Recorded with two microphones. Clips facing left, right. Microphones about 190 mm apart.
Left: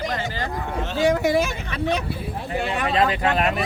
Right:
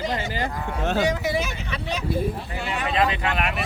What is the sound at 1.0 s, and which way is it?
Speech, 50° left (ahead or behind).